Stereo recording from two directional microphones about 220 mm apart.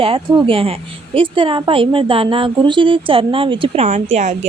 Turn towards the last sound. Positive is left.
turn(degrees=-30)  # may be behind; listen again after turning